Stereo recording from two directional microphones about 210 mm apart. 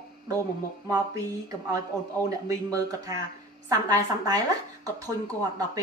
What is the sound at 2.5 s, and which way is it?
A woman's voice, 15° right (ahead or behind).